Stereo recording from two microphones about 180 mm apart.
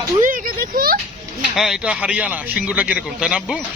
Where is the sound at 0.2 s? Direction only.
50° right (ahead or behind).